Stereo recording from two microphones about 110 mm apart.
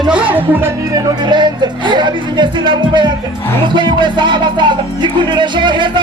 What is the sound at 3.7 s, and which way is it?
Music, 45° right (ahead or behind).